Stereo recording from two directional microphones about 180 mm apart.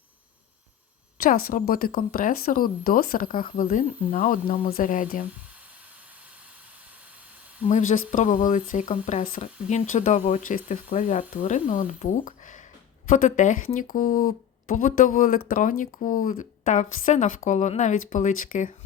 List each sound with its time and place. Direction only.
1.2 s speech: 55° left (ahead or behind)
7.7 s speech: 45° left (ahead or behind)